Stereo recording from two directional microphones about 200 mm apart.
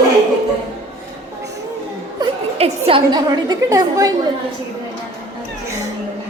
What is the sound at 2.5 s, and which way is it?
A woman's voice, 30° right (ahead or behind).